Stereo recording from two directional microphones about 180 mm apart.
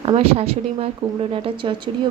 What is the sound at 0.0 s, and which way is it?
A woman's voice, 35° right (ahead or behind).